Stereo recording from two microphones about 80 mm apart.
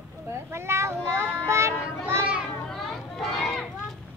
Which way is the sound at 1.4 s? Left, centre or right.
Right.